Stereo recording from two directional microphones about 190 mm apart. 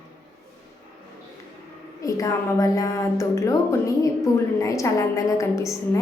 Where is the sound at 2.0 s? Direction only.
15° left (ahead or behind).